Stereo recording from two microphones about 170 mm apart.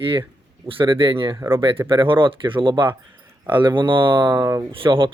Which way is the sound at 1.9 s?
30° right (ahead or behind).